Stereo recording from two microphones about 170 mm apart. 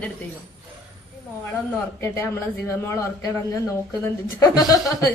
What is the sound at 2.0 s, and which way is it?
A woman's voice, 15° left (ahead or behind).